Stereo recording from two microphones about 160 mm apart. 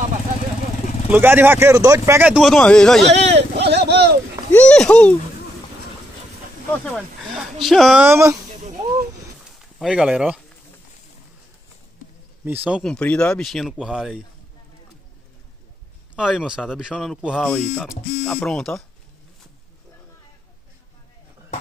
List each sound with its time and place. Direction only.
1.1 s speech: 15° right (ahead or behind)
2.4 s speech: 5° left (ahead or behind)
3.1 s a sound: 90° right
4.5 s a child's voice: 10° left (ahead or behind)
7.3 s speech: centre (ahead or behind)
8.0 s speech: 15° right (ahead or behind)
9.8 s speech: 5° right (ahead or behind)
12.4 s speech: 10° right (ahead or behind)
12.8 s speech: 5° left (ahead or behind)
16.2 s speech: 5° right (ahead or behind)